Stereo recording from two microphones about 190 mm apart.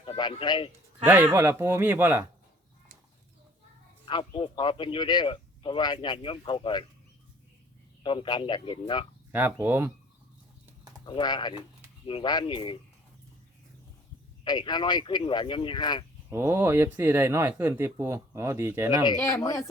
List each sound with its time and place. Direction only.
0.0 s speech: 25° left (ahead or behind)
1.0 s speech: 10° right (ahead or behind)
4.0 s a man's voice: 25° left (ahead or behind)
8.0 s a man's voice: 25° left (ahead or behind)
9.3 s speech: 10° right (ahead or behind)
11.0 s a man's voice: 25° left (ahead or behind)
14.4 s a man's voice: 25° left (ahead or behind)
16.3 s speech: 10° right (ahead or behind)
19.2 s speech: 15° left (ahead or behind)